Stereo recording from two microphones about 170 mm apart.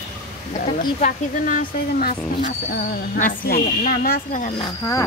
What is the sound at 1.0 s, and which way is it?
Speech, 55° left (ahead or behind).